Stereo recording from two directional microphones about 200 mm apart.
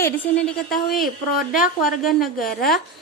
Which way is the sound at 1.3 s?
45° left (ahead or behind).